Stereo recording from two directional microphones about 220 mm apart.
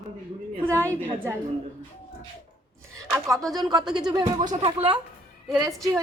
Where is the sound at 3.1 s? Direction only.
15° right (ahead or behind).